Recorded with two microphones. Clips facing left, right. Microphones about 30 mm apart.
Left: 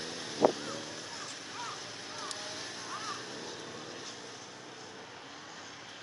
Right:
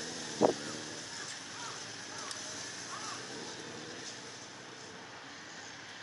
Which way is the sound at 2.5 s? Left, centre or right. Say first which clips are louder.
Left 2 dB; left.